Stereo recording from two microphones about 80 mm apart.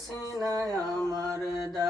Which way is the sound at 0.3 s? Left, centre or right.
Centre.